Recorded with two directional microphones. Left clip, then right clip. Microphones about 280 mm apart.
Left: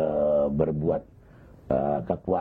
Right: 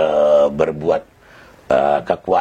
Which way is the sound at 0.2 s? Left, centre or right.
Right.